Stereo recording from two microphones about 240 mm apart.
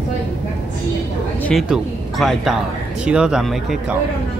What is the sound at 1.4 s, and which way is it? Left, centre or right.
Speech, centre.